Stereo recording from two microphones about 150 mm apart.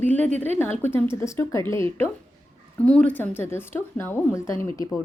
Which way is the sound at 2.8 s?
10° left (ahead or behind).